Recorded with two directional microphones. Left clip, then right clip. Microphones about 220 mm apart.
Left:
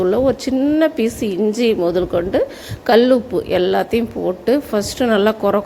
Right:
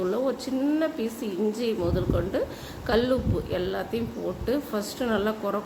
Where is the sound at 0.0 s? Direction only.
30° left (ahead or behind).